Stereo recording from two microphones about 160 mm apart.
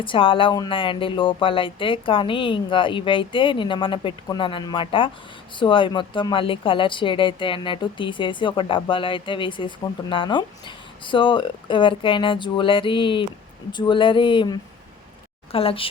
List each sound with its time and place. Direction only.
0.0 s a woman's voice: 35° left (ahead or behind)